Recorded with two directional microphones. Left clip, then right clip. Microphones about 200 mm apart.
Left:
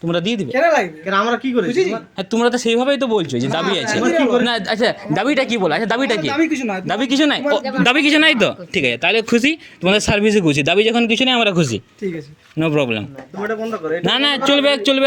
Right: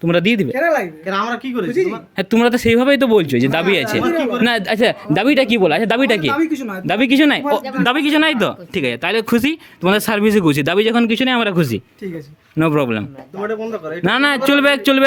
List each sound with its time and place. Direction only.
0.0 s speech: 45° right (ahead or behind)
0.5 s speech: 20° right (ahead or behind)
2.1 s speech: 45° right (ahead or behind)
4.0 s speech: 20° right (ahead or behind)
4.4 s speech: 45° right (ahead or behind)
6.3 s speech: 25° right (ahead or behind)
6.8 s speech: 45° right (ahead or behind)
7.6 s speech: 10° right (ahead or behind); by 15.0 s 40° right (ahead or behind)